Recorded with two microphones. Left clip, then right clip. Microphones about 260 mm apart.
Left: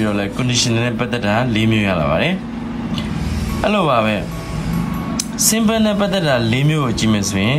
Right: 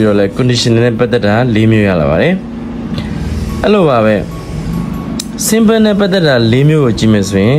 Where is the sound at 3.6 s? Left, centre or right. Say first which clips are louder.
Right 7 dB; centre.